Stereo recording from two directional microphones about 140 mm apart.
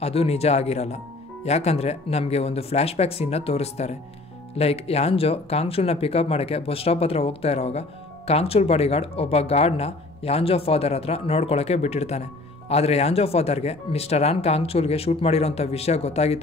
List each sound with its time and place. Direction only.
0.0 s speech: 45° left (ahead or behind)